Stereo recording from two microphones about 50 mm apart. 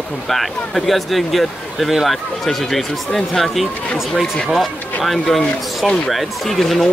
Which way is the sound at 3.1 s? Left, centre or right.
Centre.